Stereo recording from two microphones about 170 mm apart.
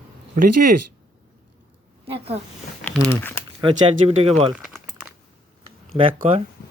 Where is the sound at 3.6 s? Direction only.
35° right (ahead or behind).